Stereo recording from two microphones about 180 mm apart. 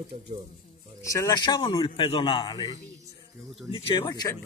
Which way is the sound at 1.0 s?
20° left (ahead or behind).